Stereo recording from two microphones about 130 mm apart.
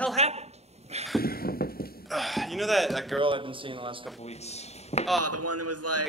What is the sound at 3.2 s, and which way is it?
Speech, 40° right (ahead or behind).